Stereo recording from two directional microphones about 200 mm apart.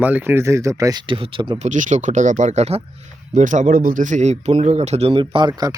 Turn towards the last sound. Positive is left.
turn(degrees=-20)  # may be behind; listen again after turning